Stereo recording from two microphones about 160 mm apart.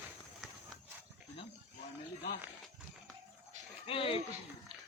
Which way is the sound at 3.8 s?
35° left (ahead or behind).